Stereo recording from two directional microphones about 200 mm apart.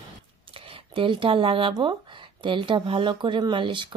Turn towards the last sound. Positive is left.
turn(degrees=-25)  # may be behind; listen again after turning